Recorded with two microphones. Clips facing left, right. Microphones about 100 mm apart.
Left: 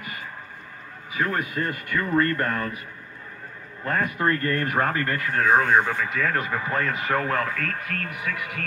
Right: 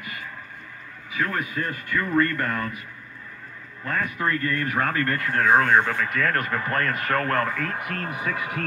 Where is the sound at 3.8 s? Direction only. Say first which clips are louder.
Left 2 dB; 40° left (ahead or behind).